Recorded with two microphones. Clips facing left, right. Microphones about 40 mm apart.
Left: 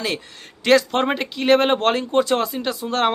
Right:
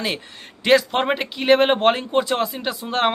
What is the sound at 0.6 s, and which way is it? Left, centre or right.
Speech, centre.